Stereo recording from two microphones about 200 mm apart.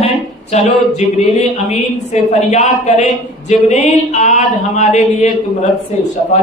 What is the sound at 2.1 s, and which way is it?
Speech, 35° left (ahead or behind).